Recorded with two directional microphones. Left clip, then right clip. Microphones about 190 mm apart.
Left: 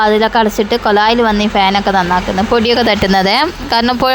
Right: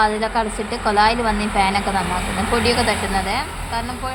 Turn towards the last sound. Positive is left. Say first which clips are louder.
# left 11 dB
turn(degrees=60)  # may be behind; listen again after turning